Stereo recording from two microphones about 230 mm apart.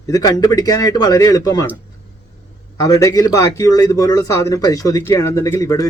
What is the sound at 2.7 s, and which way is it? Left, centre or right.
Speech, centre.